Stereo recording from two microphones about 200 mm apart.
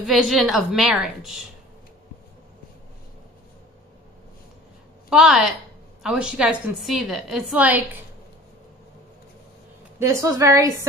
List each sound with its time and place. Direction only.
0.0 s a woman's voice: centre (ahead or behind)
5.1 s a woman's voice: centre (ahead or behind)
9.9 s a woman's voice: 15° right (ahead or behind)